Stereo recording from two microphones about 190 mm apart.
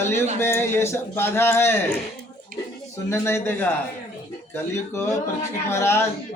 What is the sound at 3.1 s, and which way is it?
Speech, 15° left (ahead or behind).